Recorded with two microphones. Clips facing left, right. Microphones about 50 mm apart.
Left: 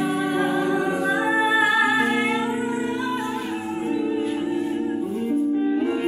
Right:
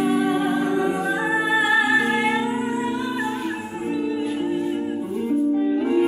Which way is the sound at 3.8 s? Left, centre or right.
Centre.